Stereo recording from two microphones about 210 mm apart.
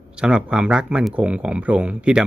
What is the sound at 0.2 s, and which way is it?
Speech, 5° right (ahead or behind).